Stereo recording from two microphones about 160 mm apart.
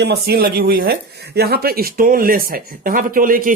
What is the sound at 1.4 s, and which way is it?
Speech, 75° right (ahead or behind).